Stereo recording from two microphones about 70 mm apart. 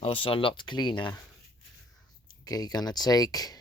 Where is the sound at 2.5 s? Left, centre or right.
Left.